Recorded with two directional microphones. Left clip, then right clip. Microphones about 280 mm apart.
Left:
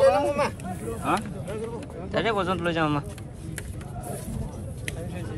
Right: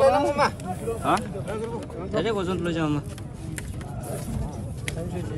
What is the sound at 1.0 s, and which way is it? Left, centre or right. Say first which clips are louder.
Speech: right 2 dB; centre.